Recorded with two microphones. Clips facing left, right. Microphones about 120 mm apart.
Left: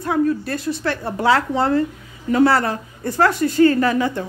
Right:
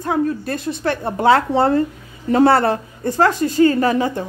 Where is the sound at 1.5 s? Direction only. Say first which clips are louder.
Right 3 dB; 30° right (ahead or behind).